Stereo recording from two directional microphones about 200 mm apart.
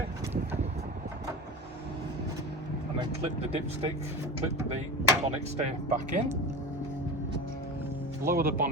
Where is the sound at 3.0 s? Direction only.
30° right (ahead or behind).